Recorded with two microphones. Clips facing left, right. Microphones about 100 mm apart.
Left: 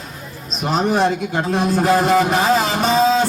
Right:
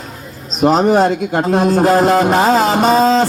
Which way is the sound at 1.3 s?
50° right (ahead or behind).